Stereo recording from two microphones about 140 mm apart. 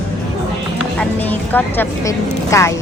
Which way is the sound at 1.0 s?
10° left (ahead or behind).